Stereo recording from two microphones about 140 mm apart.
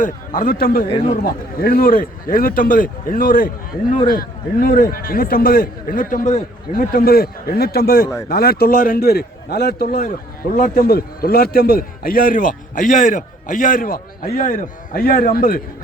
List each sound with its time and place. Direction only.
0.0 s a man's voice: 75° left (ahead or behind)
6.7 s a man's voice: 90° left